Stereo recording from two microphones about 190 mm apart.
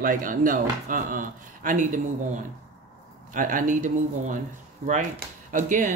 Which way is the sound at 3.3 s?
45° right (ahead or behind).